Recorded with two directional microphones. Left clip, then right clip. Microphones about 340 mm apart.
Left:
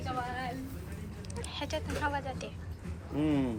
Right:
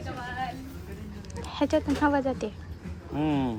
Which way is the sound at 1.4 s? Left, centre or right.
Right.